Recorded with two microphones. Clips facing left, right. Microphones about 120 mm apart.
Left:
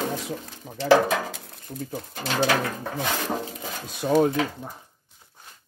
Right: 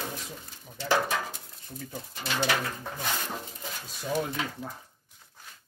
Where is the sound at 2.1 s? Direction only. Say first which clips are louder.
Left 5 dB; 75° left (ahead or behind).